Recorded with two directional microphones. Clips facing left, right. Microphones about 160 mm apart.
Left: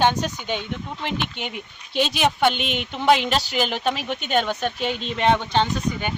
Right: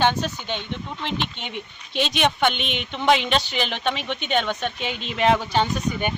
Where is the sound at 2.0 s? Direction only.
5° left (ahead or behind).